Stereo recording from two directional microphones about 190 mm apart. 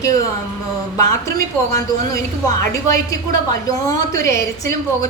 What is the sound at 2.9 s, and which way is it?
A woman's voice, 15° left (ahead or behind).